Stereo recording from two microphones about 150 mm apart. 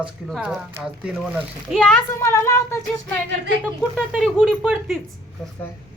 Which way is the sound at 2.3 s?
20° left (ahead or behind).